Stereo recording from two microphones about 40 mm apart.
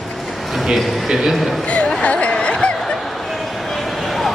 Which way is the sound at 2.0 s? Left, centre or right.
Left.